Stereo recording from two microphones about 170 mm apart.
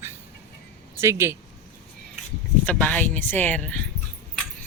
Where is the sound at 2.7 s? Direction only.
10° left (ahead or behind).